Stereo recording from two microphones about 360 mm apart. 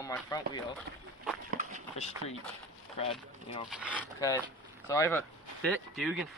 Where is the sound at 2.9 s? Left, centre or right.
Centre.